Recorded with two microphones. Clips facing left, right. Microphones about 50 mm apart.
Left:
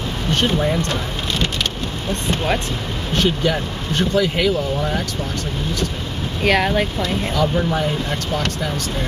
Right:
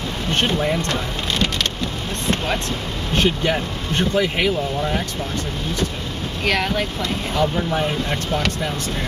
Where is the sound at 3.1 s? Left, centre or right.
Right.